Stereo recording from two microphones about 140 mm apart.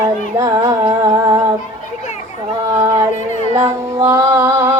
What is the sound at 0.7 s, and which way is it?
Music, 25° right (ahead or behind).